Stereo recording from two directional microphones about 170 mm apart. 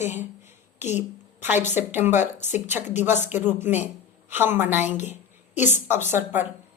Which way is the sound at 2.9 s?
10° right (ahead or behind).